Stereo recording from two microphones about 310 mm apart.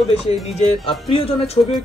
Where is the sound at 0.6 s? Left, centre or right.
Centre.